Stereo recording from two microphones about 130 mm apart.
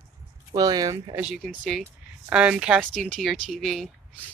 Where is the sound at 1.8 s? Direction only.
10° right (ahead or behind).